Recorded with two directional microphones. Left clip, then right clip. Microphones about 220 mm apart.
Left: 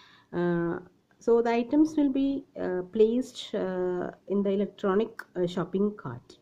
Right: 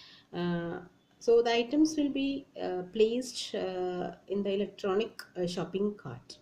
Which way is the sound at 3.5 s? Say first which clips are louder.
Left 5 dB; 40° left (ahead or behind).